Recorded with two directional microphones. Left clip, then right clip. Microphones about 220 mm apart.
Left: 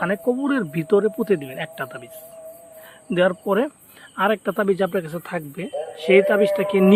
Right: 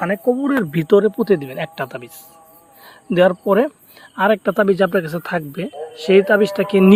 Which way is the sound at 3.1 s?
20° right (ahead or behind).